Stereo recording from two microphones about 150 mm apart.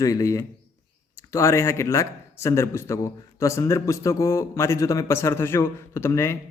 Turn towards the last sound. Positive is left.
turn(degrees=15)  # may be behind; listen again after turning